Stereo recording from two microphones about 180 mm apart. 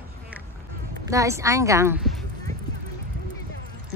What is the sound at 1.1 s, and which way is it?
Speech, 15° right (ahead or behind).